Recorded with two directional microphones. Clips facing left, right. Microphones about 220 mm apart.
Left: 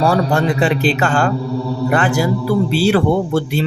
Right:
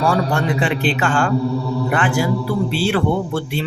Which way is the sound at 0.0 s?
40° left (ahead or behind).